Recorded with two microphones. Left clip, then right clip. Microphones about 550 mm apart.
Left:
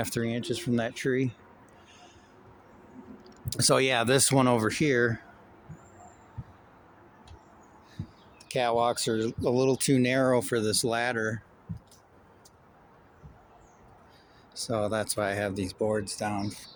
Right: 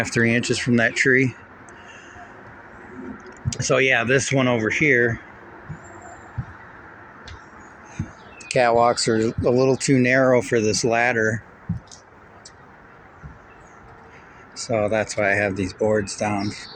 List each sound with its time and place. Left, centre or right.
0.0 s speech: left
3.2 s speech: left
8.5 s speech: left
14.5 s speech: left